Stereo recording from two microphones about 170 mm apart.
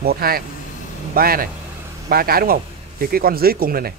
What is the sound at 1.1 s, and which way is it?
Speech, 60° right (ahead or behind).